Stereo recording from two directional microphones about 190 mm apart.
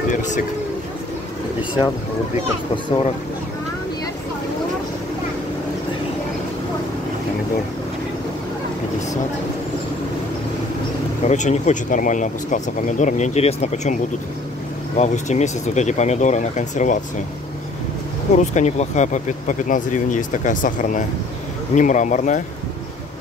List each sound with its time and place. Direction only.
0.1 s boat: 40° left (ahead or behind)
11.2 s speech: 40° left (ahead or behind)
15.0 s speech: 40° left (ahead or behind)
18.3 s speech: 40° left (ahead or behind)